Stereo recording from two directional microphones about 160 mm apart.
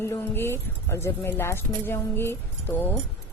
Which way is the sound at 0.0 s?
15° left (ahead or behind).